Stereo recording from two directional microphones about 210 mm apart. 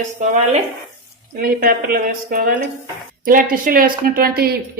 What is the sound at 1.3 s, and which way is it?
Speech, 45° right (ahead or behind).